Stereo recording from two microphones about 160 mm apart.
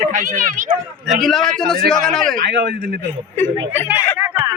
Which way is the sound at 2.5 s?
80° right.